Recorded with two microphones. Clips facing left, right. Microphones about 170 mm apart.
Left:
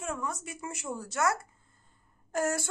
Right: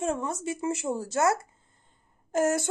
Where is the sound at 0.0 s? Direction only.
25° right (ahead or behind).